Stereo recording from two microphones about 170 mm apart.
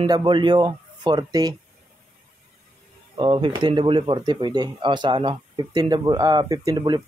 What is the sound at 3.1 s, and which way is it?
Speech, 30° right (ahead or behind).